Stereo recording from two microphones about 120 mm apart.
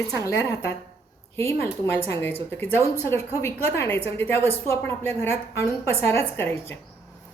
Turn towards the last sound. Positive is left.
turn(degrees=20)  # may be behind; listen again after turning